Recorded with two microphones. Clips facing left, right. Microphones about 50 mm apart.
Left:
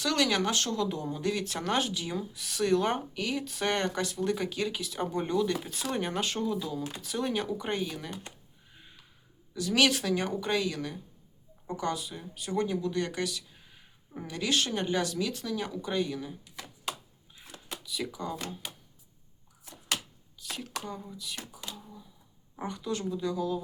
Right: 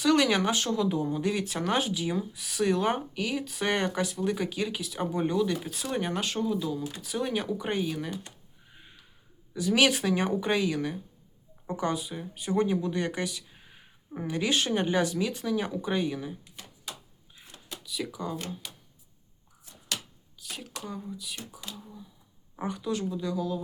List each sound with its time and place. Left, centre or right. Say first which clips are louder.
0.0 s speech: right 4 dB; centre
9.5 s speech: right 2 dB; centre
17.8 s speech: right 1 dB; centre
20.4 s a sound: left 2 dB; centre
20.8 s speech: right 2 dB; centre